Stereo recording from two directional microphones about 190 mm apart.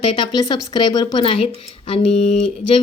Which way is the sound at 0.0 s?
25° left (ahead or behind).